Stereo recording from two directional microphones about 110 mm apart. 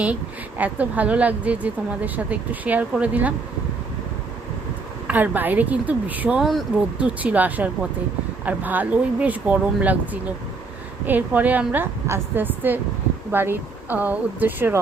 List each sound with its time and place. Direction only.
0.6 s a woman's voice: 15° right (ahead or behind)
5.0 s a woman's voice: 15° right (ahead or behind)
7.2 s a woman's voice: 15° right (ahead or behind)